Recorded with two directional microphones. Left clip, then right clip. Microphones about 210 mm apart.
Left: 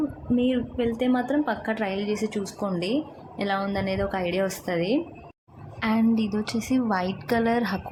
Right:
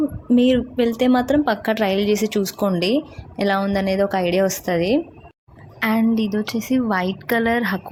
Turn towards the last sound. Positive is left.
turn(degrees=-15)  # may be behind; listen again after turning